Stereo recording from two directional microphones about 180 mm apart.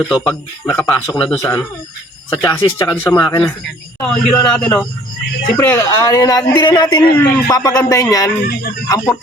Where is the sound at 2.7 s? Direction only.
15° left (ahead or behind).